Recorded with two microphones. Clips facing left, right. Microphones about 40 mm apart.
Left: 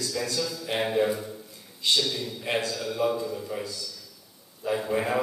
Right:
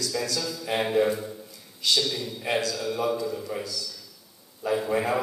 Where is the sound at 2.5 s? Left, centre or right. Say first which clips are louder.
Right 2 dB; left.